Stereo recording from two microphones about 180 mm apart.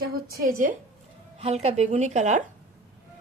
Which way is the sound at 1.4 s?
35° right (ahead or behind).